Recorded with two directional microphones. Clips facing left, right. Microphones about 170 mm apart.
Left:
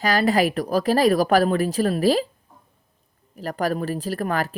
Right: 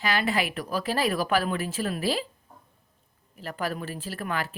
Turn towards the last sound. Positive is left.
turn(degrees=40)  # may be behind; listen again after turning